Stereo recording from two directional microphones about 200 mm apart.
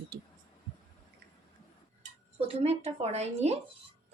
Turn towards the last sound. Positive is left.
turn(degrees=-30)  # may be behind; listen again after turning